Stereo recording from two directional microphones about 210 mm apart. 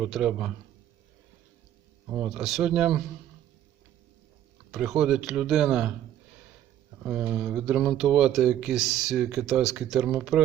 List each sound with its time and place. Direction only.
0.0 s speech: 5° right (ahead or behind)
2.0 s speech: 10° right (ahead or behind)
4.7 s speech: 5° right (ahead or behind)
7.0 s speech: 5° right (ahead or behind)